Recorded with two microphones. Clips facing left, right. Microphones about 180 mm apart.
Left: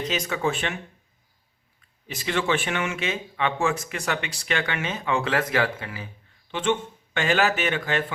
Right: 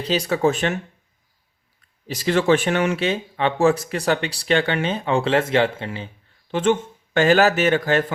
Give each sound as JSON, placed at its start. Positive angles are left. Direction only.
{"t": 0.0, "sound": "speech", "side_deg": -35}
{"t": 2.0, "sound": "speech", "side_deg": -35}
{"t": 6.5, "sound": "speech", "side_deg": -40}